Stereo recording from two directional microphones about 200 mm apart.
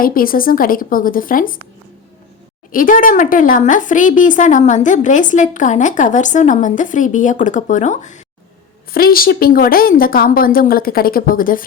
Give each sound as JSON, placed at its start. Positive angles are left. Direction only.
{"t": 0.0, "sound": "a woman's voice", "side_deg": 45}
{"t": 2.7, "sound": "a woman's voice", "side_deg": 45}
{"t": 8.9, "sound": "a woman's voice", "side_deg": 50}